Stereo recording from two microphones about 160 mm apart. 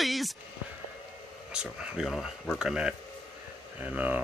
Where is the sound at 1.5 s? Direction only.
5° right (ahead or behind).